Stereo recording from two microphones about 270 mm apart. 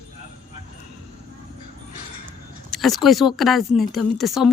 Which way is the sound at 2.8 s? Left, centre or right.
Centre.